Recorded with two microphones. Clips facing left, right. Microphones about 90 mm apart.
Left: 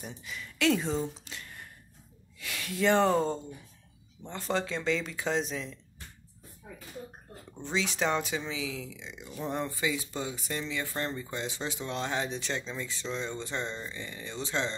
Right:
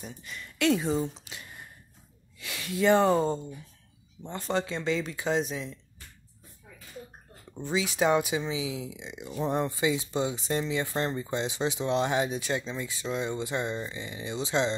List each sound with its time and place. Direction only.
0.0 s speech: centre (ahead or behind)
1.2 s a sound: 15° right (ahead or behind)
2.4 s speech: 5° right (ahead or behind)
7.6 s speech: 5° right (ahead or behind)